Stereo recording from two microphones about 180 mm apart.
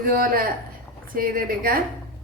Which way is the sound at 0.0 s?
55° right (ahead or behind).